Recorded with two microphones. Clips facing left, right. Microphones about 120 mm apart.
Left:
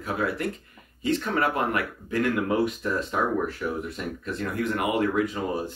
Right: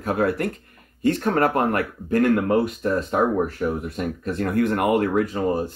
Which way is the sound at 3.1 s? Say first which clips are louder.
Right 5 dB; 35° right (ahead or behind).